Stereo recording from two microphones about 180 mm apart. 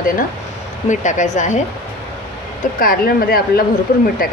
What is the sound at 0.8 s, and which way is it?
Speech, 45° left (ahead or behind).